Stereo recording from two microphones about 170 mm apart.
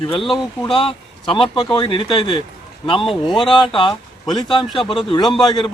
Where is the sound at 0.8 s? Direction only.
30° left (ahead or behind).